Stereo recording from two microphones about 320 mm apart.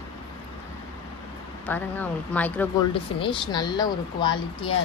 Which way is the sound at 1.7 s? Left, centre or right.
Centre.